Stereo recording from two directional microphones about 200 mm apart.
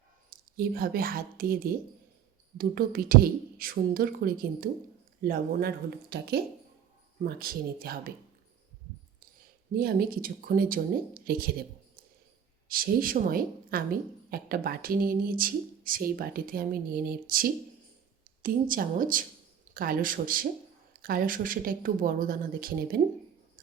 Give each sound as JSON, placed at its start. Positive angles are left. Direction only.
{"t": 0.3, "sound": "a woman's voice", "side_deg": -45}
{"t": 9.7, "sound": "a woman's voice", "side_deg": -50}
{"t": 12.6, "sound": "a woman's voice", "side_deg": -45}